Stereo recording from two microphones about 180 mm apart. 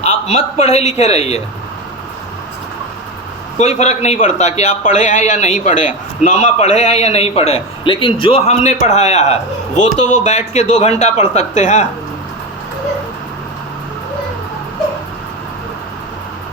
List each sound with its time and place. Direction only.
0.0 s a man's voice: 40° left (ahead or behind)
3.6 s a man's voice: 40° left (ahead or behind)